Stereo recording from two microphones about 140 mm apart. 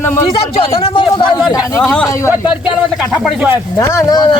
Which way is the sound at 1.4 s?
Centre (ahead or behind).